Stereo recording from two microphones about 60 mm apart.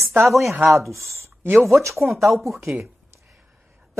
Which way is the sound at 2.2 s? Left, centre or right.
Centre.